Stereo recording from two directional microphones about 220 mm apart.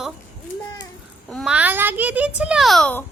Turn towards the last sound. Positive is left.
turn(degrees=5)  # may be behind; listen again after turning